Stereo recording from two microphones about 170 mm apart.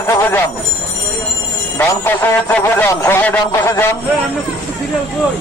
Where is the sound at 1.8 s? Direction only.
10° left (ahead or behind).